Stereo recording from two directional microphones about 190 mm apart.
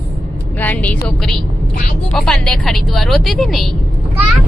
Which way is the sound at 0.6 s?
10° left (ahead or behind).